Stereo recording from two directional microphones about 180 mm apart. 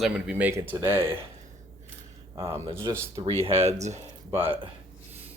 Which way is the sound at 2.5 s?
15° right (ahead or behind).